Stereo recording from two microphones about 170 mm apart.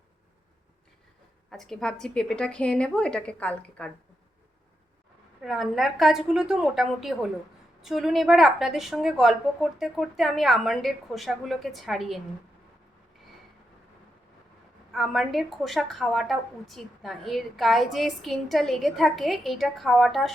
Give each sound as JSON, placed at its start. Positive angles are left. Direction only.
{"t": 1.5, "sound": "a woman's voice", "side_deg": 0}
{"t": 5.4, "sound": "a woman's voice", "side_deg": 0}
{"t": 14.9, "sound": "a woman's voice", "side_deg": 0}